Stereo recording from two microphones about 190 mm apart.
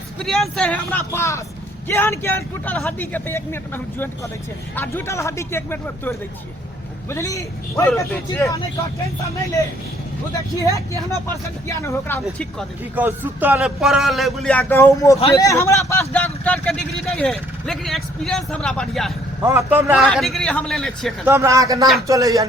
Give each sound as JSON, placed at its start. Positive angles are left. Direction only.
{"t": 0.2, "sound": "a man's voice", "side_deg": 0}
{"t": 10.6, "sound": "a man's voice", "side_deg": 15}
{"t": 12.2, "sound": "speech", "side_deg": 0}
{"t": 13.0, "sound": "a man's voice", "side_deg": -10}
{"t": 19.5, "sound": "speech", "side_deg": -10}
{"t": 21.2, "sound": "speech", "side_deg": -15}